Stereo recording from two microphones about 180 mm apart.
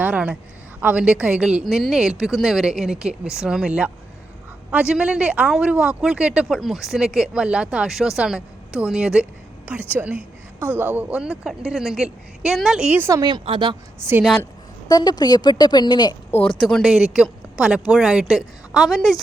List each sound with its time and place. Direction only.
0.0 s a man's voice: 5° right (ahead or behind); by 13.7 s 25° right (ahead or behind)
14.0 s a woman's voice: 15° right (ahead or behind)
14.8 s a woman's voice: 20° left (ahead or behind)
16.6 s a man's voice: centre (ahead or behind)